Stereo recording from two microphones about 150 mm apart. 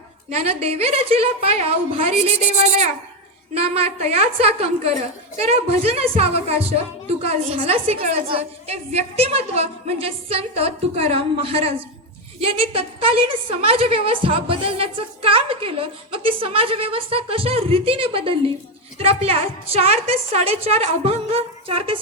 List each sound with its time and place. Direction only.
0.3 s a woman's voice: 40° right (ahead or behind)